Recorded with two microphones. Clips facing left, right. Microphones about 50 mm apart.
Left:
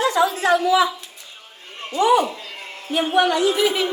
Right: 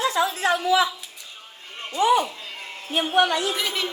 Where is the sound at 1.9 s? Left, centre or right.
Left.